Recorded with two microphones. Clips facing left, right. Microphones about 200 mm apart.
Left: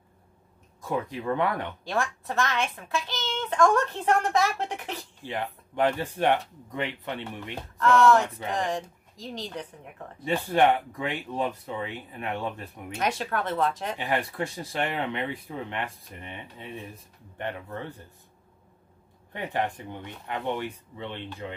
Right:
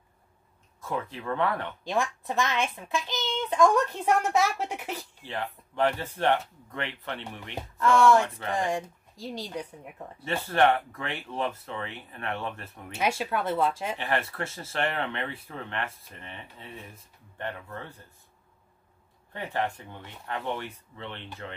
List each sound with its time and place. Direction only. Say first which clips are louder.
0.7 s speech: left 3 dB; 15° left (ahead or behind)
1.9 s a child's voice: right 1 dB; 15° right (ahead or behind)
5.2 s speech: left 2 dB; 15° left (ahead or behind)
7.5 s a child's voice: left 1 dB; 10° right (ahead or behind)
10.2 s speech: left 2 dB; 15° left (ahead or behind)
12.9 s a child's voice: even; 10° right (ahead or behind)
13.9 s speech: left 2 dB; 15° left (ahead or behind)
19.3 s speech: left 1 dB; 15° left (ahead or behind)